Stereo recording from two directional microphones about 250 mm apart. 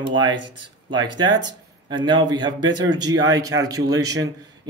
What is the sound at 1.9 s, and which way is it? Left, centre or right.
Speech, centre.